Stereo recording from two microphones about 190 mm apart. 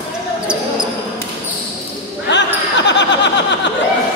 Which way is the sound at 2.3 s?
65° left (ahead or behind).